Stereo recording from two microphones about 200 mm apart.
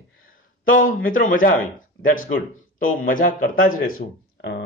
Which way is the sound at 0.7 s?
45° left (ahead or behind).